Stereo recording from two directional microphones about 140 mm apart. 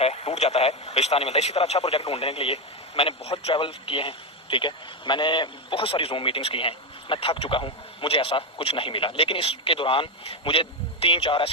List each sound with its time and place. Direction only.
0.0 s speech: 50° left (ahead or behind)